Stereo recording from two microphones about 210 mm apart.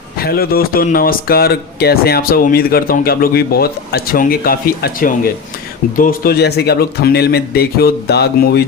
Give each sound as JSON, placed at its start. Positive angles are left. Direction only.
{"t": 0.2, "sound": "speech", "side_deg": 45}